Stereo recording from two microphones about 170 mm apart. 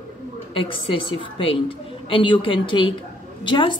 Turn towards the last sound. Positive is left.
turn(degrees=30)  # may be behind; listen again after turning